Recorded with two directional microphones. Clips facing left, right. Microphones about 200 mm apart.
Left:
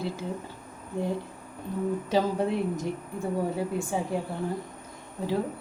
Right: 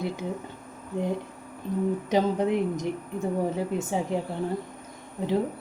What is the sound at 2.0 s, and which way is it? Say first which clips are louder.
A woman's voice: right 2 dB; 20° right (ahead or behind).